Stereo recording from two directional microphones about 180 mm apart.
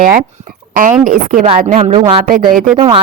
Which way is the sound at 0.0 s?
45° right (ahead or behind).